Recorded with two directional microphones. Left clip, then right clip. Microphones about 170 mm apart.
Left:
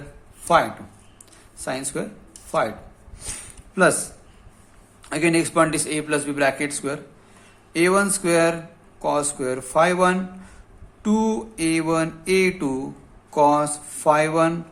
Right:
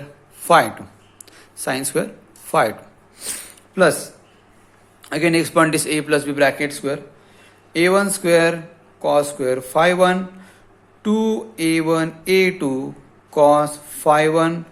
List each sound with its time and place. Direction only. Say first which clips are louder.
0.4 s a man's voice: right 4 dB; 25° right (ahead or behind)
3.2 s a sound: right 5 dB; 20° right (ahead or behind)
5.0 s a man's voice: right 3 dB; 20° right (ahead or behind)